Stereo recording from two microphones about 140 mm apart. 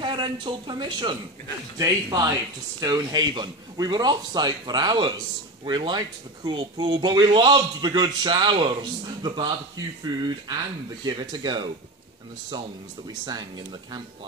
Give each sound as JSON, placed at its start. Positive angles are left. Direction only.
{"t": 0.0, "sound": "speech", "side_deg": -35}
{"t": 11.1, "sound": "speech", "side_deg": -35}
{"t": 13.2, "sound": "speech", "side_deg": -30}